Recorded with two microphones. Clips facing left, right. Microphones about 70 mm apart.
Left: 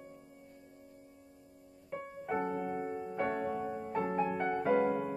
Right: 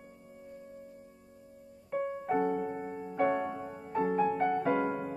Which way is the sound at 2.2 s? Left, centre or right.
Centre.